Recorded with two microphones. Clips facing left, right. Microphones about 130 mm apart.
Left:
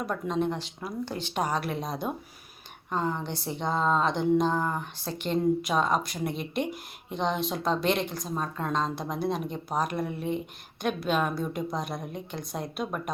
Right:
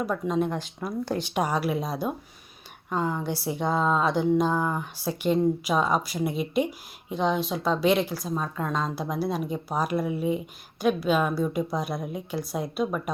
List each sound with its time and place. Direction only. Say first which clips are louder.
0.0 s a woman's voice: right 3 dB; 5° right (ahead or behind)